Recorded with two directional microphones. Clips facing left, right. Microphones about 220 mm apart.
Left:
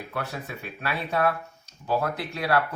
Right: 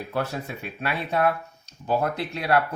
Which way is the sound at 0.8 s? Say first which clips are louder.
Right 2 dB; 20° right (ahead or behind).